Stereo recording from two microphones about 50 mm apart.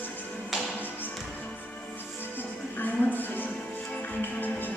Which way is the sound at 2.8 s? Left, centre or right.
Left.